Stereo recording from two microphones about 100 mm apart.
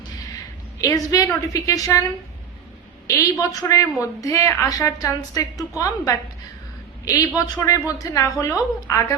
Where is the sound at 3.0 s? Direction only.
30° left (ahead or behind).